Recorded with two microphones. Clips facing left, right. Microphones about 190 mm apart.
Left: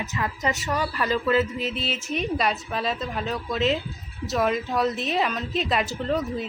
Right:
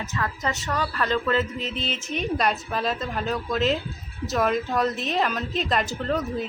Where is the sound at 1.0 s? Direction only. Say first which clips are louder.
Left 2 dB; 5° left (ahead or behind).